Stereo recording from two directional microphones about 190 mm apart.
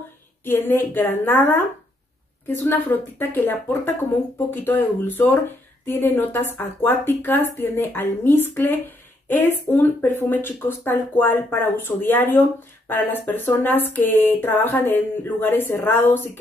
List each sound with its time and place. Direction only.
0.5 s a woman's voice: 10° left (ahead or behind)